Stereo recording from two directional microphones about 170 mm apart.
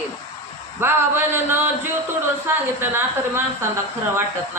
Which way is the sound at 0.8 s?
15° right (ahead or behind).